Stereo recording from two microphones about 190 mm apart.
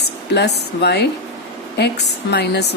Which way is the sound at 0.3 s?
60° left (ahead or behind).